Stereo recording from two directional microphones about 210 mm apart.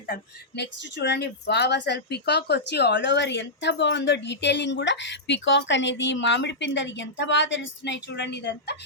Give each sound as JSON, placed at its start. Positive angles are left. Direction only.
{"t": 0.1, "sound": "speech", "side_deg": 55}